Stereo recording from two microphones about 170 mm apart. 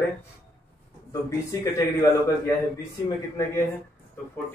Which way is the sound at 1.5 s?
15° left (ahead or behind).